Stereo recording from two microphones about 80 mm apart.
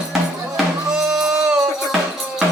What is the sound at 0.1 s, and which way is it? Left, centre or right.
Music, centre.